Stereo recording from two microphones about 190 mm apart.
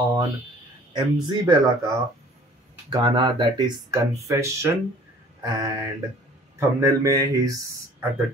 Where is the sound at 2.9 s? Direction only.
25° right (ahead or behind).